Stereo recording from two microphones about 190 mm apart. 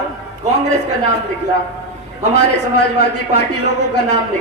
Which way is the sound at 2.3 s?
60° left (ahead or behind).